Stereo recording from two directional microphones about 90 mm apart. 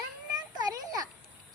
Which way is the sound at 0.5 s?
50° right (ahead or behind).